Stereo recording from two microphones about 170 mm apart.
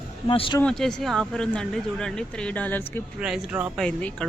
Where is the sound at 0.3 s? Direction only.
30° left (ahead or behind).